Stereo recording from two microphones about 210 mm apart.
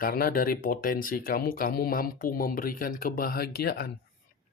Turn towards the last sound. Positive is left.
turn(degrees=50)  # may be behind; listen again after turning